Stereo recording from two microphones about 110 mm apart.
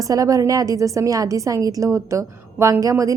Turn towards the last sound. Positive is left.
turn(degrees=-30)  # may be behind; listen again after turning